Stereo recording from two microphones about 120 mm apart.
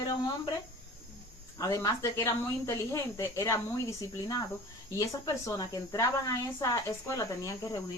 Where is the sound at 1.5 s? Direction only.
30° left (ahead or behind).